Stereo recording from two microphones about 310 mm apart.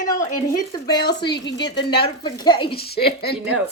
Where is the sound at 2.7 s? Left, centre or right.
Left.